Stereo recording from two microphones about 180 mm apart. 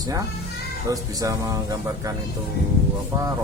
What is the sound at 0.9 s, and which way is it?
Speech, 20° right (ahead or behind).